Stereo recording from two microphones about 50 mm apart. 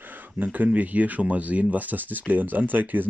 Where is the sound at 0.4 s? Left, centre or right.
Right.